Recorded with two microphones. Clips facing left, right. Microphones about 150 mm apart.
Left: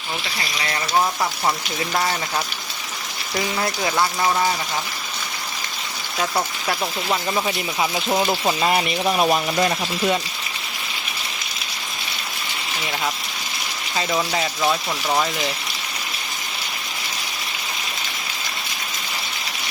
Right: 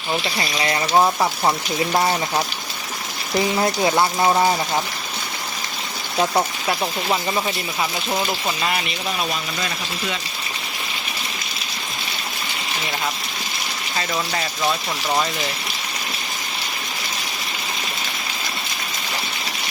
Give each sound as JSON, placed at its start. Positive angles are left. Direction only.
{"t": 0.3, "sound": "speech", "side_deg": -30}
{"t": 6.7, "sound": "speech", "side_deg": -5}
{"t": 8.3, "sound": "speech", "side_deg": 30}
{"t": 9.0, "sound": "speech", "side_deg": 50}
{"t": 14.1, "sound": "speech", "side_deg": 10}